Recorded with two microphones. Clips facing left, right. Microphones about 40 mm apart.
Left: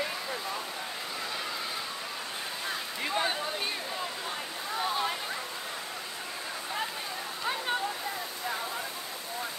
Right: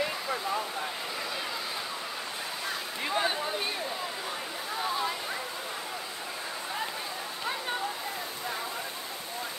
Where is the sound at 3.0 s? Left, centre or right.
Centre.